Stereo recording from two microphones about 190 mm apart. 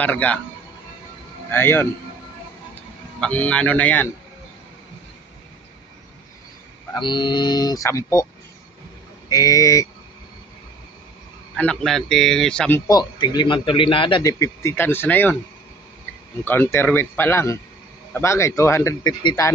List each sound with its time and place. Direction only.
0.0 s a man's voice: 5° left (ahead or behind)
1.5 s a man's voice: 10° left (ahead or behind)
3.2 s a man's voice: 5° left (ahead or behind)
6.9 s speech: 25° left (ahead or behind)
9.3 s a man's voice: 20° left (ahead or behind)
11.5 s a man's voice: 5° left (ahead or behind)
16.4 s a man's voice: 10° left (ahead or behind)